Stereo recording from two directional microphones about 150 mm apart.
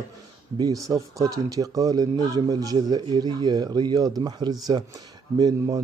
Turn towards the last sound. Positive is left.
turn(degrees=-25)  # may be behind; listen again after turning